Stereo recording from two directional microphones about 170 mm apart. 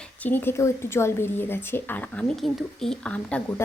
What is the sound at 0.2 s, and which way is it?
Speech, 10° left (ahead or behind).